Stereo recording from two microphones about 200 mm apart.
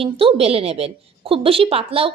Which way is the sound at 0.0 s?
25° right (ahead or behind).